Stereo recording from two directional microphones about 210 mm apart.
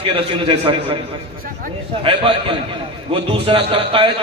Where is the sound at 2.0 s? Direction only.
25° right (ahead or behind).